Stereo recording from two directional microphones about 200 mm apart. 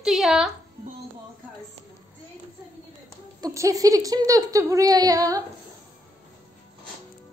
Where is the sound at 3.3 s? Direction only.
15° right (ahead or behind).